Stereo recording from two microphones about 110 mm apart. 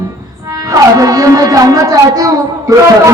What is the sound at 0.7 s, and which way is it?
Speech, 30° right (ahead or behind).